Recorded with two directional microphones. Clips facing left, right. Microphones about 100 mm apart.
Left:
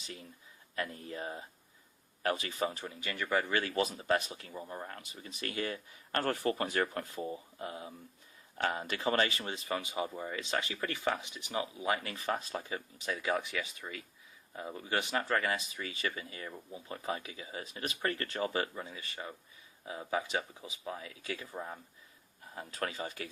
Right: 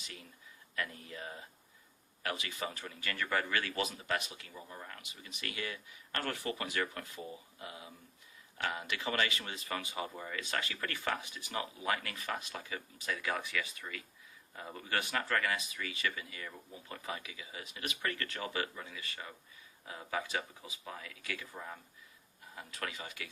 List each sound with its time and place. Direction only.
0.0 s speech: 30° left (ahead or behind)
3.6 s speech: 30° left (ahead or behind)